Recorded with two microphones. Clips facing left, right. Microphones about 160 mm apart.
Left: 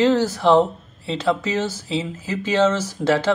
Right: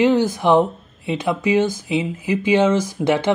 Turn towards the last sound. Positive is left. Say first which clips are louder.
# right 1 dB
turn(degrees=-15)  # may be behind; listen again after turning